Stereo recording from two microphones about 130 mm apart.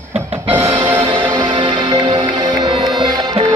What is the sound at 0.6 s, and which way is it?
Music, 55° right (ahead or behind).